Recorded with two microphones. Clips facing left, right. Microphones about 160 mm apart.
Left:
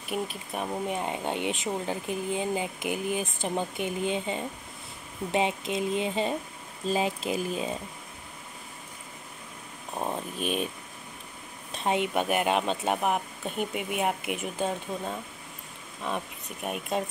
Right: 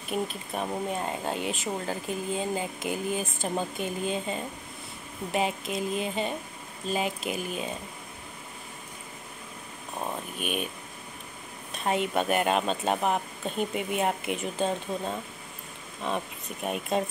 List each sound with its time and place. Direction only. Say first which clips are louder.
0.1 s speech: right 1 dB; 10° left (ahead or behind); by 7.7 s 30° left (ahead or behind)
9.9 s speech: left 2 dB; 30° left (ahead or behind)
11.7 s speech: even; 20° left (ahead or behind); by 17.0 s 5° left (ahead or behind)